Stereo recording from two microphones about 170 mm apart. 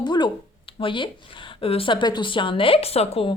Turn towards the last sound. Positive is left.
turn(degrees=35)  # may be behind; listen again after turning